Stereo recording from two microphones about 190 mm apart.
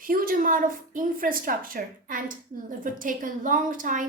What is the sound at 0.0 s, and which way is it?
A woman's voice, 50° right (ahead or behind).